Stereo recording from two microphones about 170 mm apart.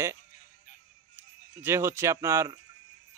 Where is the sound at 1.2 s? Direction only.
15° right (ahead or behind).